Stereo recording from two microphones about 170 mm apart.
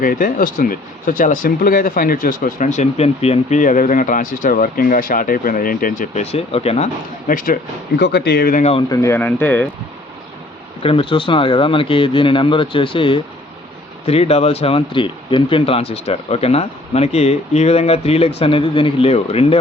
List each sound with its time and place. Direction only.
0.0 s speech: 55° left (ahead or behind)
8.9 s speech: 20° left (ahead or behind)
10.8 s speech: 30° left (ahead or behind)